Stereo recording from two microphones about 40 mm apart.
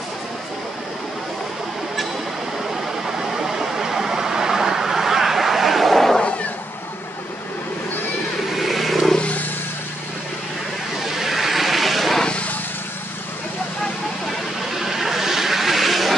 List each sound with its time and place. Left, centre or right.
2.7 s vehicle: centre
8.5 s vehicle: centre
11.1 s vehicle: centre
14.8 s vehicle: centre